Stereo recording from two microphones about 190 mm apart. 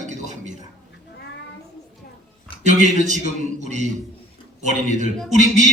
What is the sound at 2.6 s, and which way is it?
A man's voice, 40° right (ahead or behind).